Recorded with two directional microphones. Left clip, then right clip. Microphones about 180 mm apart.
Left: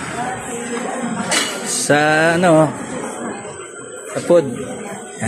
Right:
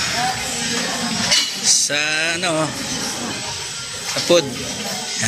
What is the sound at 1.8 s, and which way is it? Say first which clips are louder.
Speech: left 6 dB; 20° left (ahead or behind).